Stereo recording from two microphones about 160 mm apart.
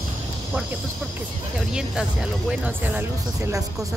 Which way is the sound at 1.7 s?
5° right (ahead or behind).